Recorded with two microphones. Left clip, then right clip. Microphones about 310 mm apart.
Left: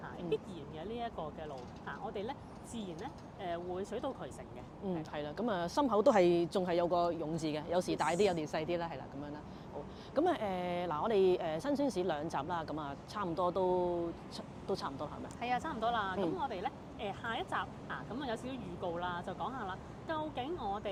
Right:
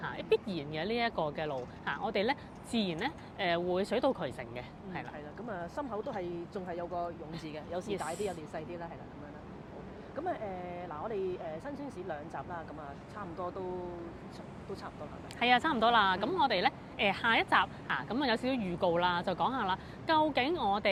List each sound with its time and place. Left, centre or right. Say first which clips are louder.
0.0 s speech: right 7 dB; right
5.1 s speech: left 5 dB; left
10.2 s speech: left 4 dB; left
14.7 s speech: left 6 dB; left
15.4 s speech: right 9 dB; right